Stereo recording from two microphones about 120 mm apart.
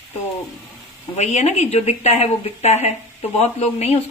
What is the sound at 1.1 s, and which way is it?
A woman's voice, 65° left (ahead or behind).